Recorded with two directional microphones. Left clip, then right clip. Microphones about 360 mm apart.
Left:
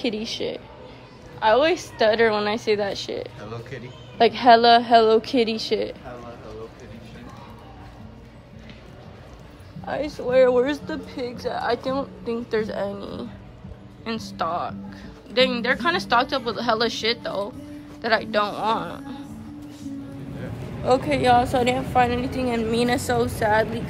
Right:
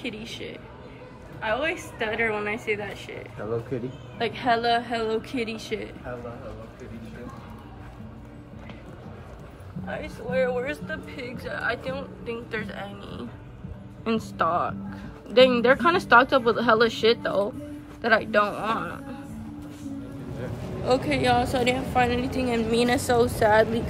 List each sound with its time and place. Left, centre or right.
0.3 s speech: left
4.2 s a woman's voice: centre
9.8 s speech: left
10.9 s a woman's voice: centre
20.8 s a woman's voice: centre